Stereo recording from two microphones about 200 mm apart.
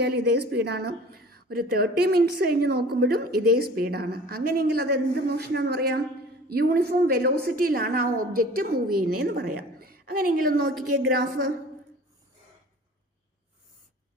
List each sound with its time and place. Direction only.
0.0 s a woman's voice: 55° right (ahead or behind)
8.1 s a woman's voice: 90° right
8.4 s a woman's voice: 50° right (ahead or behind)